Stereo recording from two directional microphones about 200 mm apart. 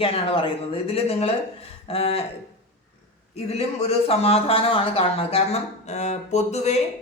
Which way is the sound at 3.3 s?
30° left (ahead or behind).